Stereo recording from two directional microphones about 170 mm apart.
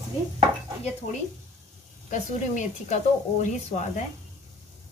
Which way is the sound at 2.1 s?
45° left (ahead or behind).